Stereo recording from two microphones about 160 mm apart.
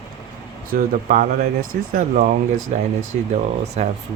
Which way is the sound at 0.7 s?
60° right (ahead or behind).